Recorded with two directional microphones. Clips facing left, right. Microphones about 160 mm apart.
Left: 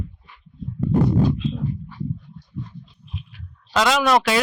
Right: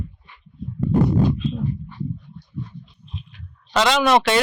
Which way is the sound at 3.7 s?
Centre (ahead or behind).